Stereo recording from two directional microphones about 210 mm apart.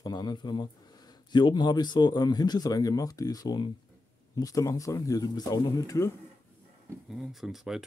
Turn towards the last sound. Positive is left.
turn(degrees=0)  # may be behind; listen again after turning